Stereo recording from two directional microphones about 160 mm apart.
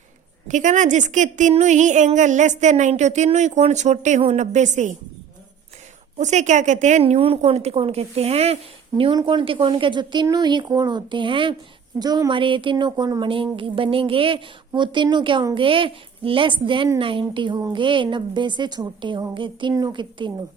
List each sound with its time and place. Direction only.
0.4 s a woman's voice: 50° right (ahead or behind)
6.1 s a woman's voice: 45° right (ahead or behind); by 20.3 s 30° right (ahead or behind)